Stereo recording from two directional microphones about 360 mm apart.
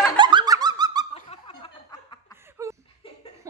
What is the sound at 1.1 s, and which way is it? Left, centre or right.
Snicker, centre.